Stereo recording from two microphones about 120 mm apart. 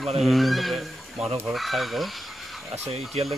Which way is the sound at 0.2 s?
Centre (ahead or behind).